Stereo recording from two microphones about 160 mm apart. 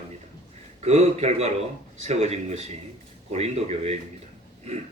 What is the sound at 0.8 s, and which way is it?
A man's voice, 45° right (ahead or behind).